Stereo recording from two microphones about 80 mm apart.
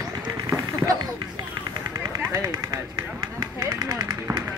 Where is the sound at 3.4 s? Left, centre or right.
Right.